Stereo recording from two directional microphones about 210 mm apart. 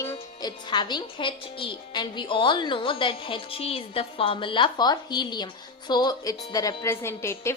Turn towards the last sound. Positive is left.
turn(degrees=10)  # may be behind; listen again after turning